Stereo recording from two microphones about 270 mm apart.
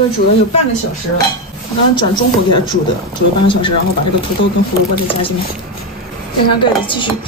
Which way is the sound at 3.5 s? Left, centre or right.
Centre.